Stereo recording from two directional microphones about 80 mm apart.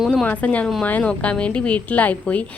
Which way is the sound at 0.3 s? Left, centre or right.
Centre.